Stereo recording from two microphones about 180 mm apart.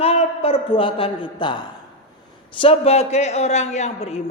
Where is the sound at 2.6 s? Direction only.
35° left (ahead or behind).